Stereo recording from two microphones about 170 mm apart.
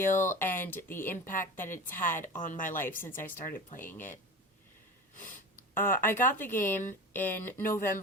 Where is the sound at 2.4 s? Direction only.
50° left (ahead or behind).